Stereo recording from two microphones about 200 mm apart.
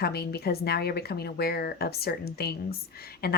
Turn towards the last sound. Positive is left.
turn(degrees=50)  # may be behind; listen again after turning